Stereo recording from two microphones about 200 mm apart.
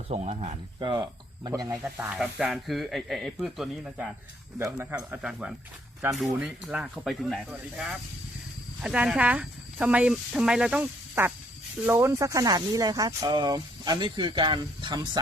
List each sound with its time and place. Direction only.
0.1 s speech: 30° right (ahead or behind)
0.8 s speech: 20° right (ahead or behind)
1.8 s speech: 5° right (ahead or behind)
8.8 s speech: 5° right (ahead or behind); by 15.2 s 20° right (ahead or behind)